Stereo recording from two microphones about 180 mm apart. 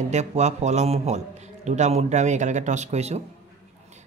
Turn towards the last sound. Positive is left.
turn(degrees=-35)  # may be behind; listen again after turning